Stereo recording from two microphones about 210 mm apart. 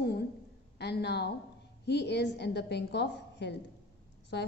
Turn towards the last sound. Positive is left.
turn(degrees=55)  # may be behind; listen again after turning